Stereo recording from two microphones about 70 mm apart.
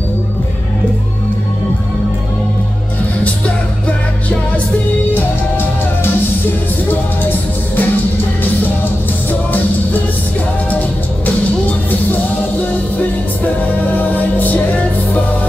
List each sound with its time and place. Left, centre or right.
6.9 s music: left
9.3 s music: left
13.4 s music: left